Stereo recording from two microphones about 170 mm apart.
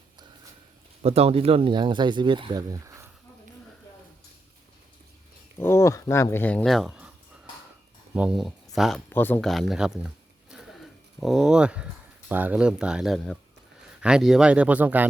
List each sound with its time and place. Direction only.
1.0 s speech: 35° right (ahead or behind); by 3.1 s 20° right (ahead or behind)
5.5 s speech: 15° left (ahead or behind); by 7.1 s 5° right (ahead or behind)
8.1 s speech: 5° right (ahead or behind); by 9.5 s 10° left (ahead or behind)
9.5 s speech: centre (ahead or behind)
10.5 s a sound: centre (ahead or behind)
11.2 s speech: centre (ahead or behind)